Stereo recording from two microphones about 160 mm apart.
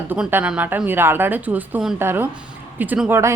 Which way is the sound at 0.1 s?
10° right (ahead or behind).